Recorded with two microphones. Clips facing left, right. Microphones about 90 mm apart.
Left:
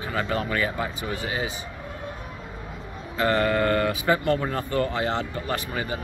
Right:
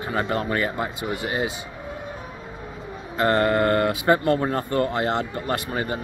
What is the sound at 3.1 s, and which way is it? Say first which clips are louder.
Speech: right 2 dB; 40° right (ahead or behind).